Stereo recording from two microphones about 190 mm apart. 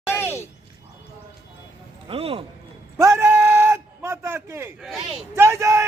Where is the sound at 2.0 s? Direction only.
30° right (ahead or behind).